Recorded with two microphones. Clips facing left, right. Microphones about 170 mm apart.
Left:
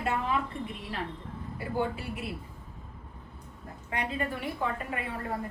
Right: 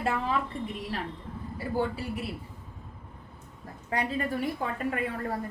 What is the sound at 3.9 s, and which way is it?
Speech, 35° right (ahead or behind).